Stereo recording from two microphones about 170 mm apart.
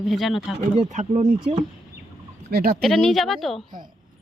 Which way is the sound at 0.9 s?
45° right (ahead or behind).